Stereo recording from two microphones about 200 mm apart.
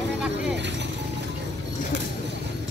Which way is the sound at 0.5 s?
60° right (ahead or behind).